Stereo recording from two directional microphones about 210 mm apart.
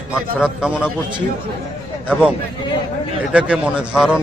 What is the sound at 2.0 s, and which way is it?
Speech, 5° right (ahead or behind).